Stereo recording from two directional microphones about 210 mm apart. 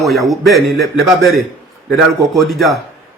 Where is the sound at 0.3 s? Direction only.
Centre (ahead or behind).